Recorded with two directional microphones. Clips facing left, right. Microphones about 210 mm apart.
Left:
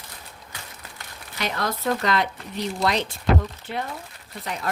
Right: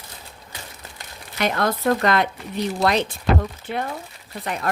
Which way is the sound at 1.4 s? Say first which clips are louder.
Right 6 dB; 55° right (ahead or behind).